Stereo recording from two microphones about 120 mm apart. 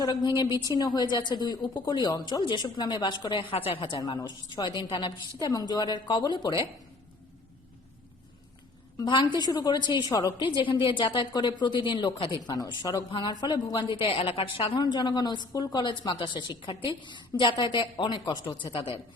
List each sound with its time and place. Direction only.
0.0 s a woman's voice: 35° left (ahead or behind)
4.0 s a woman's voice: 35° left (ahead or behind)
9.0 s a woman's voice: 40° left (ahead or behind)